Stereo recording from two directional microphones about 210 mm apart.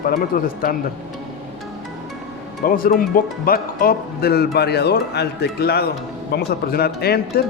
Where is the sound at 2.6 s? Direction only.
40° left (ahead or behind).